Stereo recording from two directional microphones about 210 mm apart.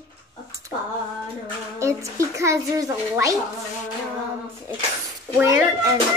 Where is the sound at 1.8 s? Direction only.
15° right (ahead or behind).